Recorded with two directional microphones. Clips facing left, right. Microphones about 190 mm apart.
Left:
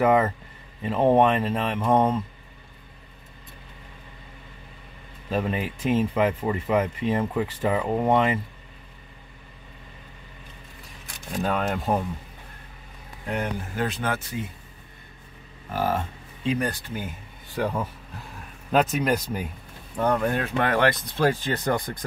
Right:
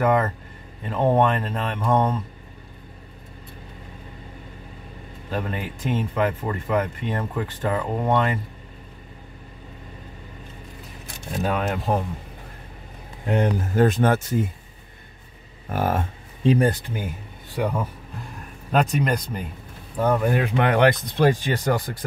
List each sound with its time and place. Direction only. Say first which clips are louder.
0.0 s speech: left 1 dB; 5° left (ahead or behind)
5.3 s speech: left 2 dB; 10° left (ahead or behind)
11.4 s speech: right 1 dB; 5° right (ahead or behind)
13.2 s speech: right 7 dB; 25° right (ahead or behind)
13.7 s speech: right 10 dB; 45° right (ahead or behind)
15.7 s speech: right 2 dB; 55° right (ahead or behind)
16.4 s speech: right 7 dB; 30° right (ahead or behind)
17.6 s speech: right 2 dB; centre (ahead or behind)
20.0 s speech: right 3 dB; 5° right (ahead or behind)